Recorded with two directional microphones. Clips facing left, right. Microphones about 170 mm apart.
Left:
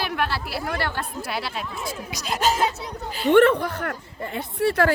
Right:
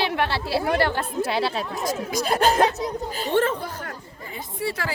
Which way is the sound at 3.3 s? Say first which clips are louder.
Left 7 dB; 65° left (ahead or behind).